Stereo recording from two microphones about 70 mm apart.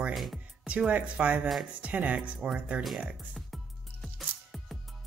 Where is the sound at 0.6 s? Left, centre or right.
Centre.